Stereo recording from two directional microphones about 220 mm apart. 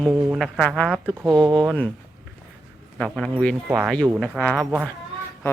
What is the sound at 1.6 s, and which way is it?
Speech, 5° left (ahead or behind).